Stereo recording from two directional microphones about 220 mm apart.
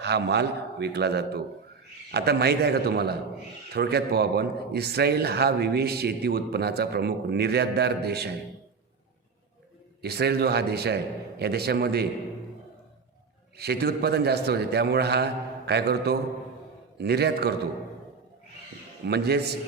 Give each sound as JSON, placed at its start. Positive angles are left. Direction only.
{"t": 0.0, "sound": "speech", "side_deg": -50}
{"t": 10.0, "sound": "speech", "side_deg": -45}
{"t": 13.6, "sound": "speech", "side_deg": -45}
{"t": 19.0, "sound": "speech", "side_deg": -50}